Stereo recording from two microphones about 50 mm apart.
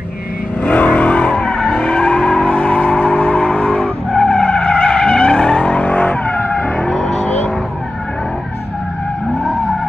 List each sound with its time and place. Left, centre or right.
0.7 s vehicle: left
6.9 s vehicle: centre
7.2 s vehicle: left